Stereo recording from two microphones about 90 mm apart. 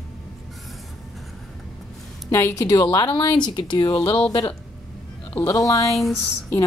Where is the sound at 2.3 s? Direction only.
35° left (ahead or behind).